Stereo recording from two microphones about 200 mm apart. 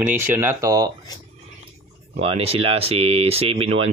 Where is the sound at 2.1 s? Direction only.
30° right (ahead or behind).